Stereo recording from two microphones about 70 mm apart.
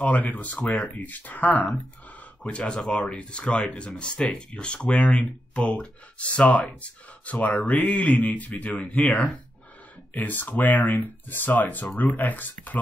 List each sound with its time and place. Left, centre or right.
0.0 s speech: left